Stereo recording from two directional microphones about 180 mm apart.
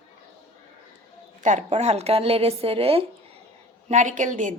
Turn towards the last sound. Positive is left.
turn(degrees=-45)  # may be behind; listen again after turning